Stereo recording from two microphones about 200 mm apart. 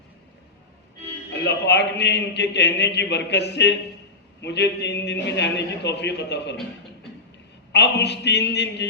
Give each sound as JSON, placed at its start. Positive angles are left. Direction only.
{"t": 1.3, "sound": "a man's voice", "side_deg": 60}
{"t": 7.7, "sound": "a man's voice", "side_deg": 60}